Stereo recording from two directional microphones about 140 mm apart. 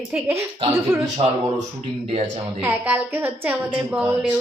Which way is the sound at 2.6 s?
15° right (ahead or behind).